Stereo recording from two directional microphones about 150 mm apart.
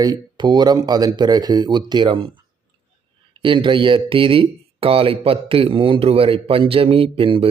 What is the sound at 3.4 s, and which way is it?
A man's voice, 35° right (ahead or behind).